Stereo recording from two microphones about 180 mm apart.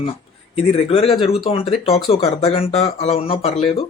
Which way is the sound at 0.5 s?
35° left (ahead or behind).